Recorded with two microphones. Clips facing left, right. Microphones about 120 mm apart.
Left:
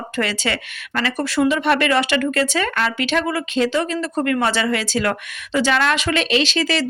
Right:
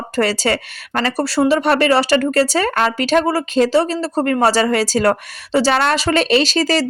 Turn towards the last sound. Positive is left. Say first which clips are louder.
# right 4 dB
turn(degrees=-40)  # may be behind; listen again after turning